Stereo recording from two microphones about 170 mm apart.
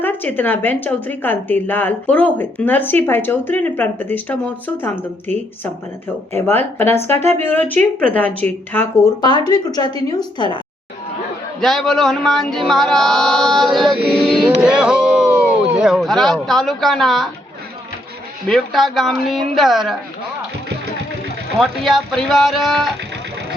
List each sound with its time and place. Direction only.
0.0 s speech: 10° left (ahead or behind)
9.5 s a woman's voice: 25° left (ahead or behind)
11.6 s mantra: centre (ahead or behind)
14.6 s speech: 5° right (ahead or behind)
18.4 s mantra: centre (ahead or behind)
21.6 s mantra: centre (ahead or behind)